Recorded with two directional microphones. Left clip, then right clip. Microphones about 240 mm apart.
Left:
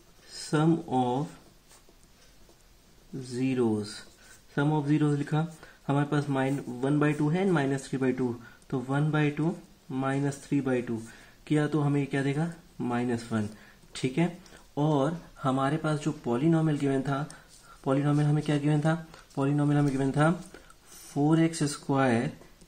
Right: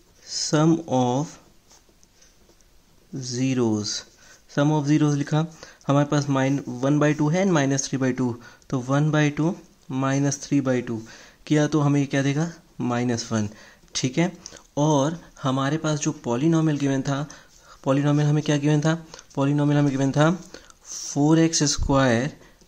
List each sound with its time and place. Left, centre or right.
0.5 s speech: right
3.3 s speech: right